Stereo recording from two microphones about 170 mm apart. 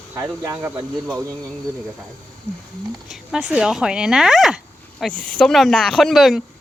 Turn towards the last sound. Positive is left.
turn(degrees=0)  # may be behind; listen again after turning